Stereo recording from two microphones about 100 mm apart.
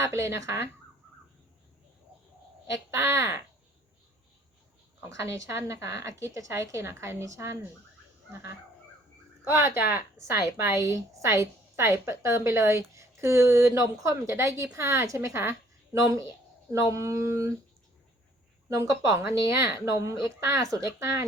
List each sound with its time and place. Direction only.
0.0 s a woman's voice: 30° right (ahead or behind)
2.6 s a woman's voice: 30° right (ahead or behind)
5.0 s a woman's voice: 30° right (ahead or behind)
18.7 s speech: 35° right (ahead or behind)